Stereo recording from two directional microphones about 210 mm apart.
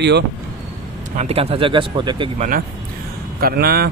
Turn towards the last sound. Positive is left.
turn(degrees=-45)  # may be behind; listen again after turning